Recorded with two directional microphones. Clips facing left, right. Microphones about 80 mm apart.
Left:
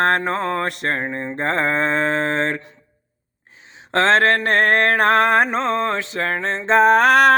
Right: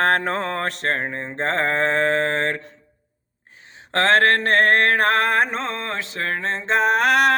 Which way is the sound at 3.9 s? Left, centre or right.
Left.